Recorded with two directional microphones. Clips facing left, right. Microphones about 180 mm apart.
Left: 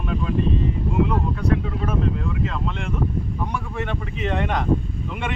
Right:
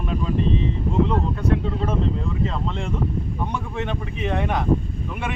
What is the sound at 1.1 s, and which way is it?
Speech, 25° right (ahead or behind).